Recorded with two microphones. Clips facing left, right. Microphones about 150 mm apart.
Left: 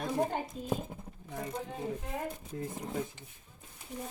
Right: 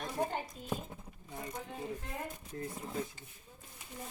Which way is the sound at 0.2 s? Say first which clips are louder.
Even; 25° left (ahead or behind).